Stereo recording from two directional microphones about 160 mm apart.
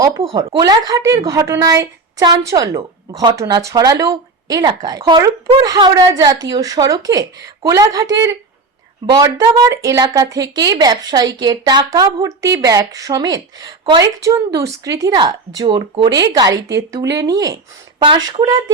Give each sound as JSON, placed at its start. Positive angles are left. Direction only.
{"t": 0.3, "sound": "speech", "side_deg": -25}